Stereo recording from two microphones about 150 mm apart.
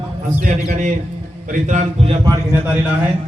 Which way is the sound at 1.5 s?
55° right (ahead or behind).